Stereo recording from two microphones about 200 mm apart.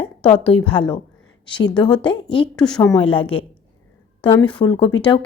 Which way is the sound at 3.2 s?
25° left (ahead or behind).